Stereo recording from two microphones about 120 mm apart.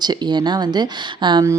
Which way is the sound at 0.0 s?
35° right (ahead or behind).